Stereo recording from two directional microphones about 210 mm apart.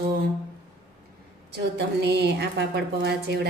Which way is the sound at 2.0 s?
50° right (ahead or behind).